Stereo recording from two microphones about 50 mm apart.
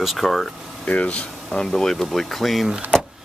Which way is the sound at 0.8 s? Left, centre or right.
Left.